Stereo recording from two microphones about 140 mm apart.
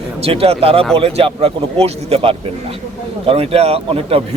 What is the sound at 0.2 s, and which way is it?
A man's voice, 45° right (ahead or behind).